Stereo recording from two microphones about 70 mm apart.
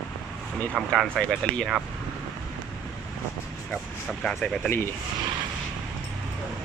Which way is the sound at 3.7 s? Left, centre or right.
Centre.